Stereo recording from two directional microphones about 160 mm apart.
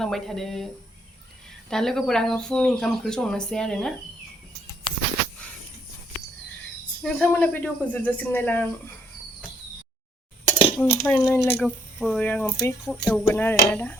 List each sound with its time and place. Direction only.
0.0 s speech: centre (ahead or behind)
1.7 s speech: 5° left (ahead or behind)
4.9 s a sound: 35° left (ahead or behind)
7.0 s speech: 5° left (ahead or behind)
10.8 s speech: 10° left (ahead or behind)